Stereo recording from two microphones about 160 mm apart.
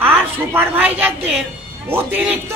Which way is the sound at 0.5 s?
15° right (ahead or behind).